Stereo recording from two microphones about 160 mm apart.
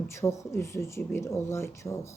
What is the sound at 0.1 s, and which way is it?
A woman's voice, 15° left (ahead or behind).